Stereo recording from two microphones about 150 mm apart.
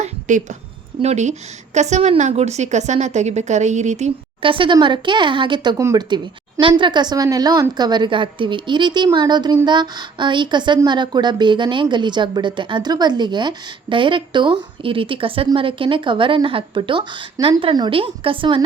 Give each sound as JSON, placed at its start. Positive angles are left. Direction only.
{"t": 0.0, "sound": "a woman's voice", "side_deg": -55}
{"t": 4.4, "sound": "a woman's voice", "side_deg": -35}